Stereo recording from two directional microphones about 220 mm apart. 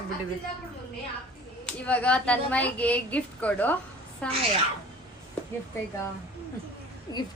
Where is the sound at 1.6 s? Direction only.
5° left (ahead or behind).